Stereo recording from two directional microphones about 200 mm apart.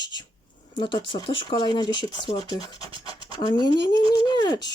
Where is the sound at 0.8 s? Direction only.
25° left (ahead or behind).